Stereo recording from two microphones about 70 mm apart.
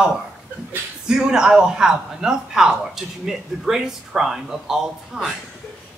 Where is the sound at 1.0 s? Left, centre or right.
Centre.